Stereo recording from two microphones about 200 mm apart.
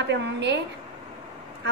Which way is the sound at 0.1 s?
60° right (ahead or behind).